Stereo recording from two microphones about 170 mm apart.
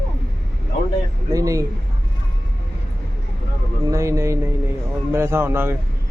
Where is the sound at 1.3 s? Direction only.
20° right (ahead or behind).